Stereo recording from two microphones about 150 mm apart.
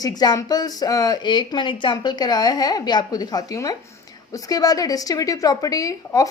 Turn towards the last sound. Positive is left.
turn(degrees=25)  # may be behind; listen again after turning